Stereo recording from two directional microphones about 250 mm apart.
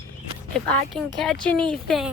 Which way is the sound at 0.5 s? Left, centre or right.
Centre.